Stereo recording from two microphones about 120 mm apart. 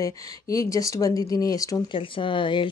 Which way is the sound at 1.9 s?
45° left (ahead or behind).